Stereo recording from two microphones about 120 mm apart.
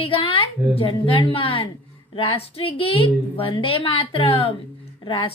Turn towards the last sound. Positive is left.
turn(degrees=45)  # may be behind; listen again after turning